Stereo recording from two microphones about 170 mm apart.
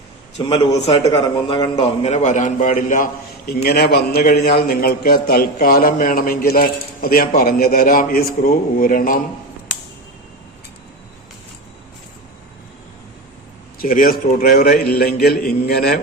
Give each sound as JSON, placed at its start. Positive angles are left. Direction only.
{"t": 0.3, "sound": "a man's voice", "side_deg": 35}
{"t": 13.7, "sound": "a man's voice", "side_deg": 55}